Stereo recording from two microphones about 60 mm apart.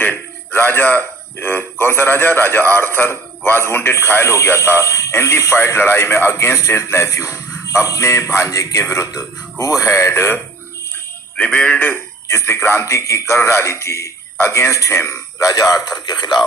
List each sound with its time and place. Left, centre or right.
0.0 s a man's voice: left
6.3 s a man's voice: left
11.5 s speech: left
12.3 s a man's voice: left